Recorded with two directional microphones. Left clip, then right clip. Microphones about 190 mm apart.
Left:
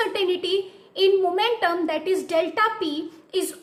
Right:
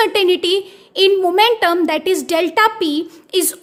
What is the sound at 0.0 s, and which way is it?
A woman's voice, 60° right (ahead or behind).